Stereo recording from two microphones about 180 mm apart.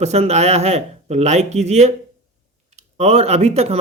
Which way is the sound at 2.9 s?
35° right (ahead or behind).